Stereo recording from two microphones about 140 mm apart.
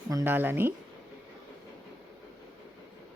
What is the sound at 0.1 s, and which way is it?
Speech, 20° right (ahead or behind).